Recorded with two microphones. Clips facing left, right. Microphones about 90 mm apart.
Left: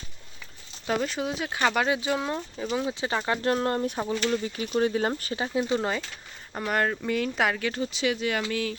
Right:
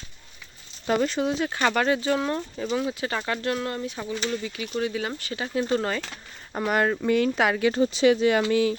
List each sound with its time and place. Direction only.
0.9 s speech: centre (ahead or behind)
3.0 s speech: 20° left (ahead or behind); by 5.4 s 40° left (ahead or behind)
5.7 s speech: 15° left (ahead or behind)
6.5 s speech: 5° right (ahead or behind)
7.7 s speech: 35° right (ahead or behind)